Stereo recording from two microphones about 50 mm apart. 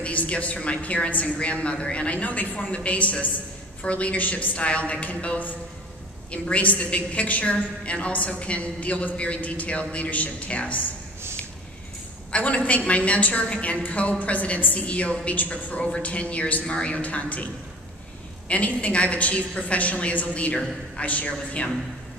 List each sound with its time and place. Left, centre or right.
0.0 s a woman's voice: left
12.3 s a woman's voice: left
18.5 s a woman's voice: left